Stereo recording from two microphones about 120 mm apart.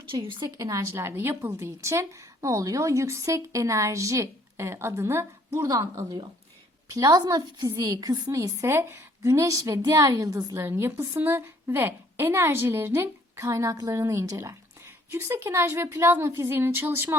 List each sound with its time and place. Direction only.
0.4 s a woman's voice: 30° right (ahead or behind)